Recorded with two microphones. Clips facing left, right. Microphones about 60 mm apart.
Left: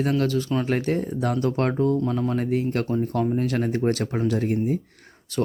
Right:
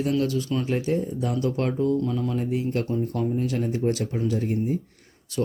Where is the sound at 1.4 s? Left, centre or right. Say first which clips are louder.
Left 1 dB; left.